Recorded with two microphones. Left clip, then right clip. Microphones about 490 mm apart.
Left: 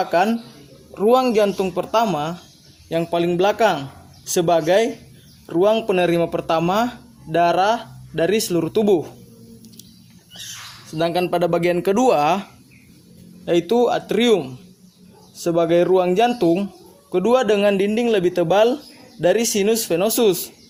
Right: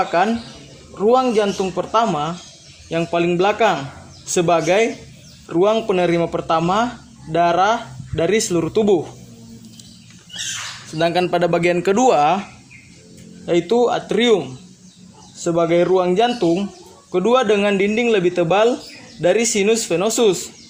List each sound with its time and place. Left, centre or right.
0.0 s a man's voice: left
10.9 s speech: left
13.4 s a man's voice: left